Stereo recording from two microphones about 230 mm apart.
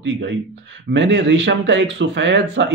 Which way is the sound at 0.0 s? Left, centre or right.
Right.